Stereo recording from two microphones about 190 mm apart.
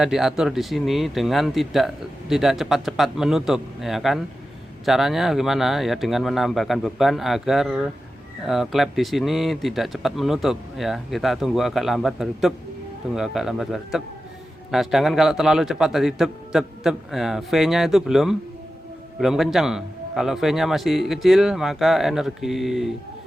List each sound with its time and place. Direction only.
0.0 s speech: centre (ahead or behind)